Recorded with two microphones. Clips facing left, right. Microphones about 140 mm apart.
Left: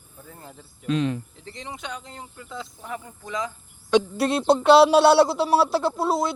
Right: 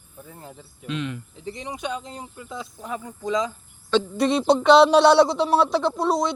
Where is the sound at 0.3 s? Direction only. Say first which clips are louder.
Right 1 dB; 15° right (ahead or behind).